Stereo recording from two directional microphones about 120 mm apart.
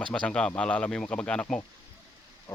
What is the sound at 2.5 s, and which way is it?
Music, 20° left (ahead or behind).